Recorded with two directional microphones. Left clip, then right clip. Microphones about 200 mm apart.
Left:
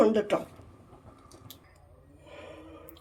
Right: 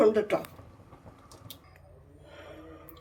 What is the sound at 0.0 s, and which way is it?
Speech, 25° left (ahead or behind).